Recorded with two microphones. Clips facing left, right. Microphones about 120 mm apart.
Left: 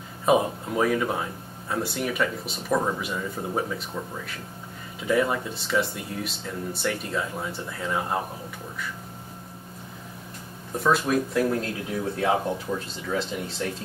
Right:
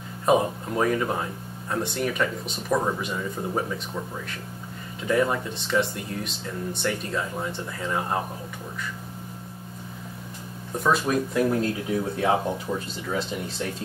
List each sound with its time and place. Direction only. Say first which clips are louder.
0.2 s speech: even; centre (ahead or behind)
5.0 s speech: even; centre (ahead or behind)
10.8 s speech: even; centre (ahead or behind)